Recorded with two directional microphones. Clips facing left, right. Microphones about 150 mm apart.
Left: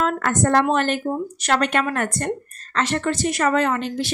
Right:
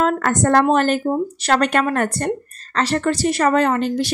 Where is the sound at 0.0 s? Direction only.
40° right (ahead or behind).